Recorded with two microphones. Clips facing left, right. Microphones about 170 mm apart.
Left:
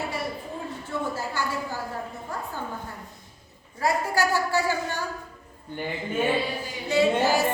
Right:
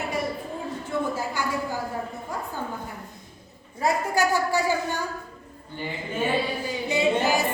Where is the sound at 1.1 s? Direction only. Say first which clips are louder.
Right 2 dB; 15° right (ahead or behind).